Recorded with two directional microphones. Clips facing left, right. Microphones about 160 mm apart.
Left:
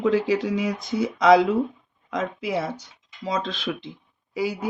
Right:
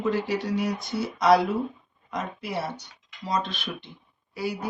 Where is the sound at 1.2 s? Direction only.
90° left.